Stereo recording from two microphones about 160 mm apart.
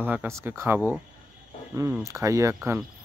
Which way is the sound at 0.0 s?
10° right (ahead or behind).